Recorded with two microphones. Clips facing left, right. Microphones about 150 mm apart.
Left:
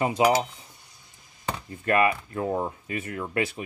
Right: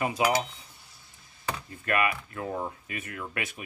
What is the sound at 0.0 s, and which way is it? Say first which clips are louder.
Speech: left 5 dB; 25° left (ahead or behind).